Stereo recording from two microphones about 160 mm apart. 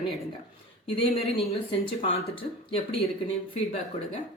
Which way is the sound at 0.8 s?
35° left (ahead or behind).